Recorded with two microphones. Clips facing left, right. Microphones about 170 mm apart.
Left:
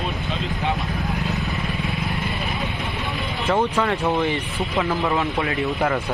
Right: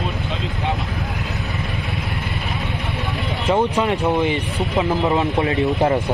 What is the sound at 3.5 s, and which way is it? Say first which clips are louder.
Speech: right 2 dB; 20° right (ahead or behind).